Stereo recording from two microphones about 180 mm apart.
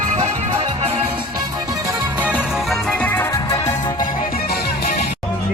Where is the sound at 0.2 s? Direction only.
35° right (ahead or behind).